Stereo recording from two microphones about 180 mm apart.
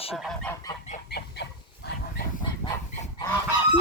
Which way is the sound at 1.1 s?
65° left (ahead or behind).